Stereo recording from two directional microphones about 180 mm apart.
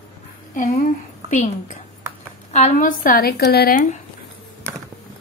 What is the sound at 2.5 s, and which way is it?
Speech, 40° left (ahead or behind).